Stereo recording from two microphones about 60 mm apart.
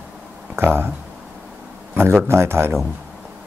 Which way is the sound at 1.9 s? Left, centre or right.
Right.